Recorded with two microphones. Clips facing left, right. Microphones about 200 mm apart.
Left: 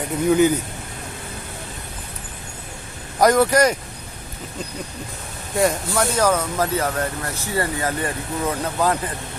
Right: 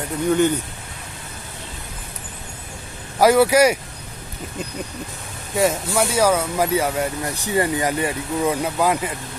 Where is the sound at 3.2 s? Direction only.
5° right (ahead or behind).